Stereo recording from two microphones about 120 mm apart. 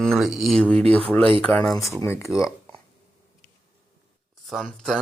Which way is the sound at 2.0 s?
20° left (ahead or behind).